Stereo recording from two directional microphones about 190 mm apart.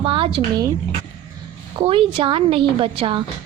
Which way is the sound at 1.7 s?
30° right (ahead or behind).